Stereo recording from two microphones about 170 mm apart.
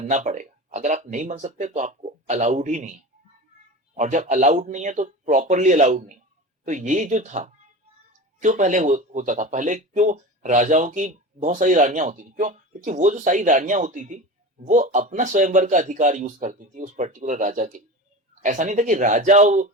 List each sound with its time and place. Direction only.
0.0 s speech: 45° right (ahead or behind)
3.9 s speech: 45° right (ahead or behind)